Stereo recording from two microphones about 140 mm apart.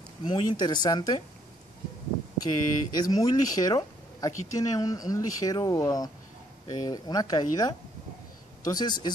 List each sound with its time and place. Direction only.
0.3 s speech: 30° left (ahead or behind)
2.4 s speech: 30° left (ahead or behind)